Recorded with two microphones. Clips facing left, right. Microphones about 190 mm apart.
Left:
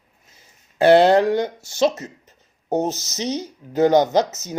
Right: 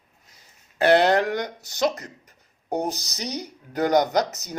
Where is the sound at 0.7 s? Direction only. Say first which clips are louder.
Left 5 dB; 25° left (ahead or behind).